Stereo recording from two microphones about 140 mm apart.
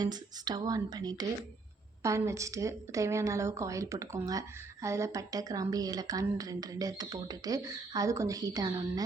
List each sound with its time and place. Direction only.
0.0 s a woman's voice: 30° right (ahead or behind)